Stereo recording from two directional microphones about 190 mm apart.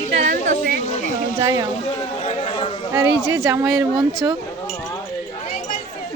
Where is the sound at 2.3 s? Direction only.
30° left (ahead or behind).